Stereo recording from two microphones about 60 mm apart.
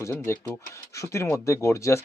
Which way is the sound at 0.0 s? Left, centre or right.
Left.